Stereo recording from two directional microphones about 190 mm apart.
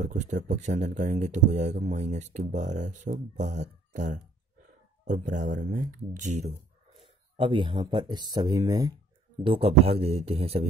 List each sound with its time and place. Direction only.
0.0 s speech: 40° right (ahead or behind)
7.0 s speech: 25° right (ahead or behind)
9.4 s speech: 30° right (ahead or behind)